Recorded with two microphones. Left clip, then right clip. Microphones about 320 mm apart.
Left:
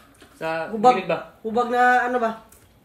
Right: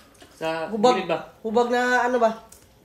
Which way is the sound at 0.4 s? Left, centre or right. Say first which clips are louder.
Left 1 dB; centre.